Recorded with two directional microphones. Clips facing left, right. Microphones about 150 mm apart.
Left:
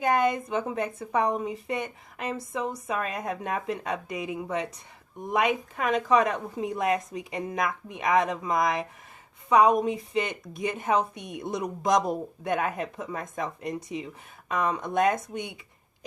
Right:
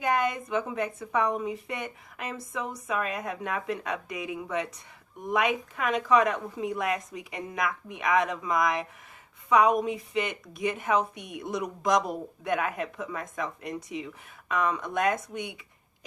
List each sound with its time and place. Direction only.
0.0 s a woman's voice: 35° left (ahead or behind)
11.1 s a woman's voice: 10° right (ahead or behind)
11.3 s a woman's voice: 30° left (ahead or behind)